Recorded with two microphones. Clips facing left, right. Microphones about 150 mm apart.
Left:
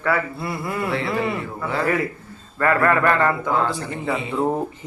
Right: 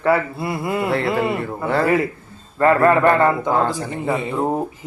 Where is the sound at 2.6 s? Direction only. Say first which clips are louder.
Right 4 dB; 25° right (ahead or behind).